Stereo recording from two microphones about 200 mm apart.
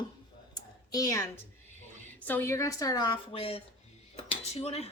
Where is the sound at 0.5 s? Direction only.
20° left (ahead or behind).